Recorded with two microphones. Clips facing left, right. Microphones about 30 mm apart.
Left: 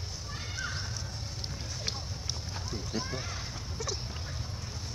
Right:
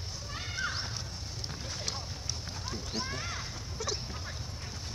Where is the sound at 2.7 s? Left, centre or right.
Right.